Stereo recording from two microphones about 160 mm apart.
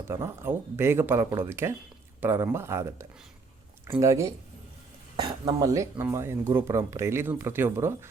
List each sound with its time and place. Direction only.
0.1 s speech: 15° right (ahead or behind)